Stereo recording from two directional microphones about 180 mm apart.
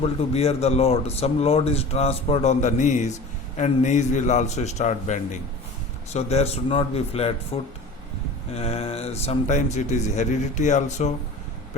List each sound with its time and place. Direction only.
0.0 s speech: 35° left (ahead or behind)